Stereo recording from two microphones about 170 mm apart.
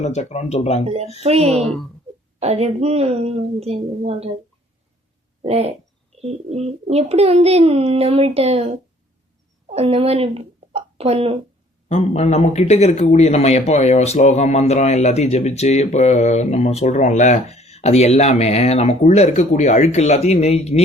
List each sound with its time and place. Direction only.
0.0 s speech: 40° left (ahead or behind)
0.9 s a child's voice: 40° right (ahead or behind)
5.4 s a child's voice: 35° right (ahead or behind)
11.9 s speech: 40° left (ahead or behind)